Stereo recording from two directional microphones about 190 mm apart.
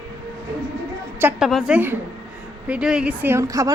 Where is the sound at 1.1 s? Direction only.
10° right (ahead or behind).